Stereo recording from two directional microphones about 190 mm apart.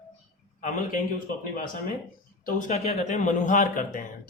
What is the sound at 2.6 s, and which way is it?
A man's voice, 40° left (ahead or behind).